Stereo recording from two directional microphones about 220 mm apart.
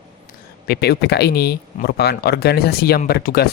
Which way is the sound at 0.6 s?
45° left (ahead or behind).